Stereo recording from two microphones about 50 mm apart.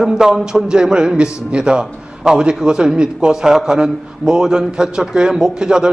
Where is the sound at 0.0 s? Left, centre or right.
Centre.